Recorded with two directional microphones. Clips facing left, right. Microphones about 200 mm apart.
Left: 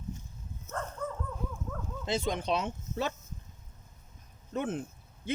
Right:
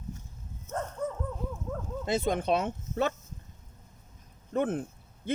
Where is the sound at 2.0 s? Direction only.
55° right (ahead or behind).